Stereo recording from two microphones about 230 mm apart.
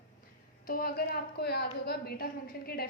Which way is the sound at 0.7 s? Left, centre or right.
Left.